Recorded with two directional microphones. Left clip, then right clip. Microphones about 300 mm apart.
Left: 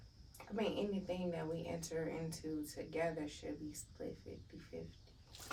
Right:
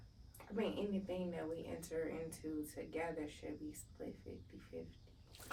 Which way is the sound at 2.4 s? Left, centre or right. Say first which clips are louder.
Left 1 dB; centre.